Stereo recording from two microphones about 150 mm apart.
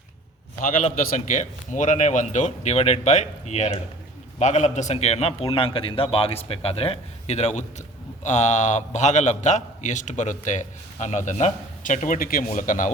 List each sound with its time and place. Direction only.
0.6 s a man's voice: 60° left (ahead or behind)
12.5 s speech: 60° left (ahead or behind)